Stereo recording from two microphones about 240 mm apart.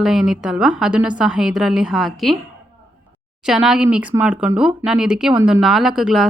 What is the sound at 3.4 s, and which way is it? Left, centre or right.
Speech, centre.